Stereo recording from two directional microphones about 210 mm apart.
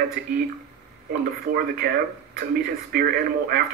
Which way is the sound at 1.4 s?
45° right (ahead or behind).